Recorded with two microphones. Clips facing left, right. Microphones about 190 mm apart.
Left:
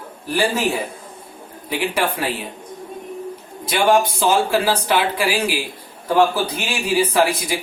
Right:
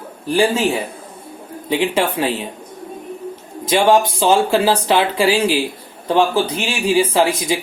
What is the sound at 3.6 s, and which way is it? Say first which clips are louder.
Speech: right 3 dB; 25° right (ahead or behind).